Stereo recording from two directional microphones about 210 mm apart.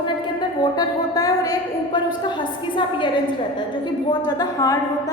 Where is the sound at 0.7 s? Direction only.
15° left (ahead or behind).